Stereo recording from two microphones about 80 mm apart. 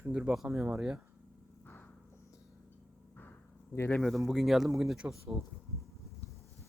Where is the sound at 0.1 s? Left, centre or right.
Centre.